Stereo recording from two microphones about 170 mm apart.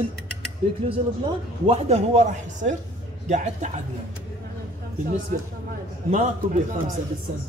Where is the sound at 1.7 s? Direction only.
35° right (ahead or behind).